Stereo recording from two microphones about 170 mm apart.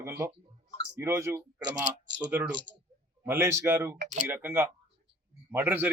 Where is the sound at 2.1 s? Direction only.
90° right.